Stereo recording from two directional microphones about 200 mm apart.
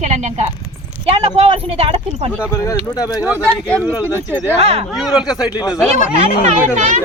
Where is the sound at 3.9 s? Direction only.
10° right (ahead or behind).